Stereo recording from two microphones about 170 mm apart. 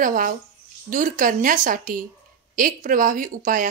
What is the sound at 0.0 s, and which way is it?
A woman's voice, 55° right (ahead or behind).